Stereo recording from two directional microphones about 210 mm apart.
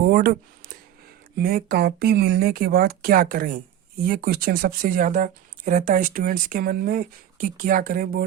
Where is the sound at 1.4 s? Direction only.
45° right (ahead or behind).